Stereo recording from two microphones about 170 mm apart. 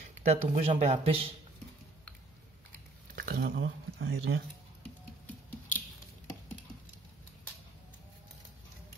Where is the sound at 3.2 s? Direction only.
65° right (ahead or behind); by 3.7 s 90° right.